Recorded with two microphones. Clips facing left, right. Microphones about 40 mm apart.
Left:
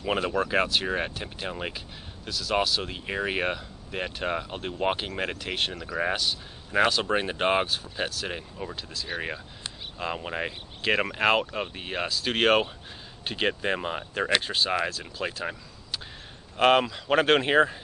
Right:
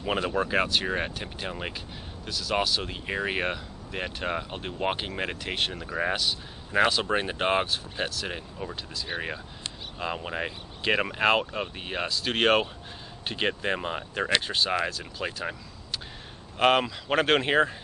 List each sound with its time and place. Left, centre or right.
0.0 s speech: centre